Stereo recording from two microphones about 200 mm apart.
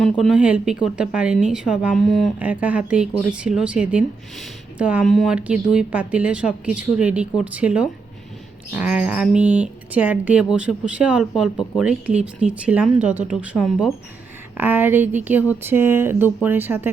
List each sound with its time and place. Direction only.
0.0 s speech: centre (ahead or behind)
11.5 s speech: 20° left (ahead or behind)
11.8 s speech: 5° right (ahead or behind)